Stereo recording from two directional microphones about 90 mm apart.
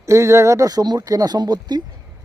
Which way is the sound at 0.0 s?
35° right (ahead or behind).